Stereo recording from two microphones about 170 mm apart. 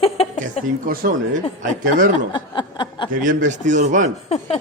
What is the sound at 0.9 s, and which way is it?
Speech, 55° right (ahead or behind).